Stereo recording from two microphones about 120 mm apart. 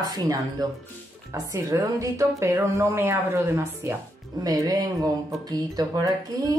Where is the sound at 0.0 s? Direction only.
30° right (ahead or behind).